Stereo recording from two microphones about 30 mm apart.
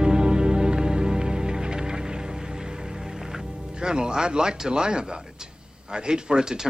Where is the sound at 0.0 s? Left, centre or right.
Right.